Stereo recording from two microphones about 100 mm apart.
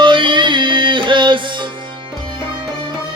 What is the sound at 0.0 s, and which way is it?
Music, 55° right (ahead or behind).